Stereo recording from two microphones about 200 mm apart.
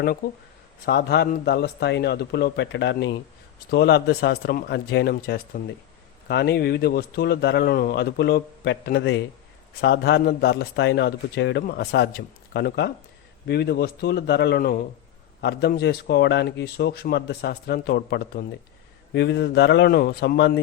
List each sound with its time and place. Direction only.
0.9 s a man's voice: 55° left (ahead or behind)